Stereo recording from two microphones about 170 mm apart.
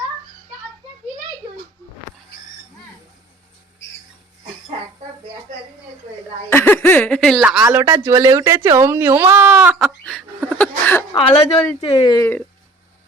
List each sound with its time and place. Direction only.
6.5 s speech: 15° left (ahead or behind)
11.1 s speech: 30° left (ahead or behind)